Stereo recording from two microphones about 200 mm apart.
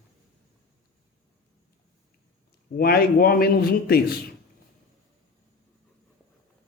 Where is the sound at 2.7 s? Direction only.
50° left (ahead or behind).